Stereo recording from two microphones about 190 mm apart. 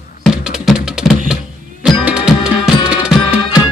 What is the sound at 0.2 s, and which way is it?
Music, centre (ahead or behind).